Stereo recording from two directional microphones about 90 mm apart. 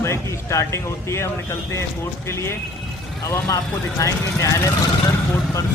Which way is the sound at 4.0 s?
35° left (ahead or behind).